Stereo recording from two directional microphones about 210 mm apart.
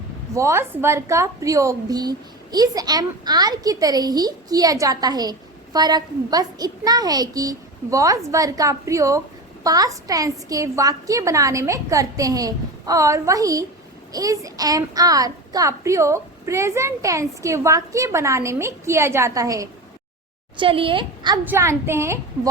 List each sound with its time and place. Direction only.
0.3 s a woman's voice: 15° right (ahead or behind)
21.4 s a woman's voice: 10° right (ahead or behind)